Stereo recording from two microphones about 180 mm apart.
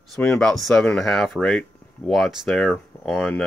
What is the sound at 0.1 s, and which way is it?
Speech, 5° left (ahead or behind).